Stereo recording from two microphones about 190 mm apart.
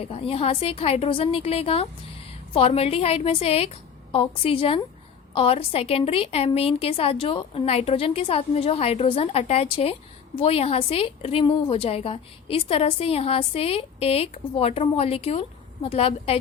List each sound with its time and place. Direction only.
0.0 s a woman's voice: 30° left (ahead or behind)